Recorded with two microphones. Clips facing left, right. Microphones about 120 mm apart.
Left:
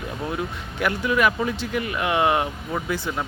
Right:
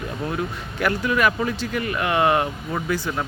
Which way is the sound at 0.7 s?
15° left (ahead or behind).